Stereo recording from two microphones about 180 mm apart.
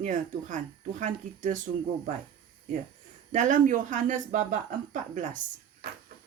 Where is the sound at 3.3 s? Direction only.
45° right (ahead or behind).